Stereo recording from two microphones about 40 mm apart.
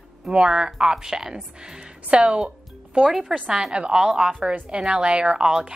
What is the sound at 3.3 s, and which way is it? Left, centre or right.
Speech, right.